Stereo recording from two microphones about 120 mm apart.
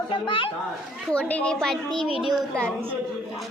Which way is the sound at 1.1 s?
10° left (ahead or behind).